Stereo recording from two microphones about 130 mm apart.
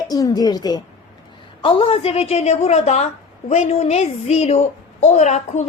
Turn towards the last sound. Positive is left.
turn(degrees=60)  # may be behind; listen again after turning